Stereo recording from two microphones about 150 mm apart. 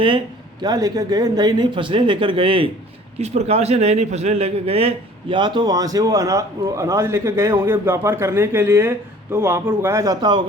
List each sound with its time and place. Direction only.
0.6 s a man's voice: 25° right (ahead or behind)